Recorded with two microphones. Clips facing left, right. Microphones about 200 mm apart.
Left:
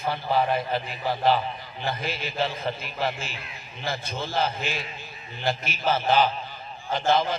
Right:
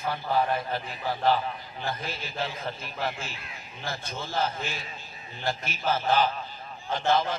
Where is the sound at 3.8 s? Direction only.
80° left.